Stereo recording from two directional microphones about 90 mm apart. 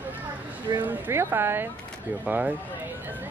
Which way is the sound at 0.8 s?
20° right (ahead or behind).